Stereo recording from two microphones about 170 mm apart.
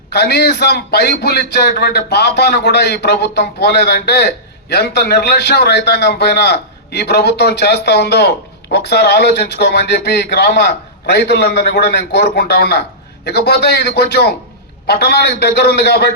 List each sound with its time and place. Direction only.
0.1 s speech: 75° left (ahead or behind)